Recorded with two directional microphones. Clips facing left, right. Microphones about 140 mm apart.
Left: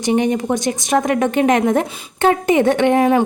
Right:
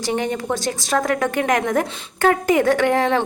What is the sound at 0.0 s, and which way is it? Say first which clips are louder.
A woman's voice: left 6 dB; 20° left (ahead or behind).